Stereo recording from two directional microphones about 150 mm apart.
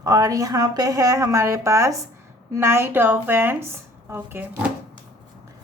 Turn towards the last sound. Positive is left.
turn(degrees=-15)  # may be behind; listen again after turning